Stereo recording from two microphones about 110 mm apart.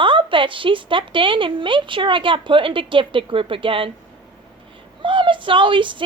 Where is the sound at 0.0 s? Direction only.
50° right (ahead or behind).